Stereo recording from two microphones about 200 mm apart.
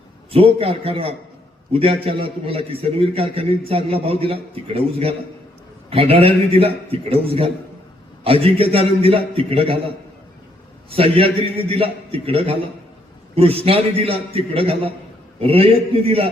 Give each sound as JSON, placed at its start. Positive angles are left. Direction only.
{"t": 0.3, "sound": "a man's voice", "side_deg": -30}
{"t": 10.8, "sound": "a man's voice", "side_deg": -30}